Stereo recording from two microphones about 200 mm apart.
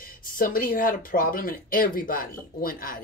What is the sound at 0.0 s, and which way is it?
Speech, 45° left (ahead or behind).